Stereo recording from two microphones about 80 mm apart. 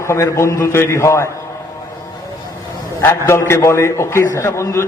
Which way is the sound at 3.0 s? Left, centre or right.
Left.